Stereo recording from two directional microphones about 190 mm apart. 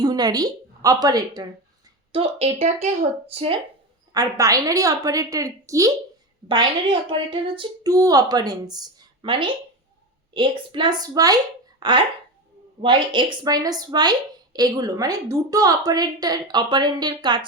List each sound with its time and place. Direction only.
0.0 s a woman's voice: 20° right (ahead or behind)
2.1 s speech: 30° right (ahead or behind)
4.1 s a woman's voice: 20° right (ahead or behind)